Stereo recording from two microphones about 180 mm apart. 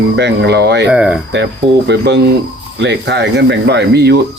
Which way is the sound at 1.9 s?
70° right (ahead or behind).